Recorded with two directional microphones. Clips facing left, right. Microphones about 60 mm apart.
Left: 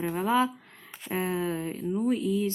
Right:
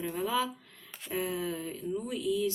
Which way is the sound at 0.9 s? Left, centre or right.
Centre.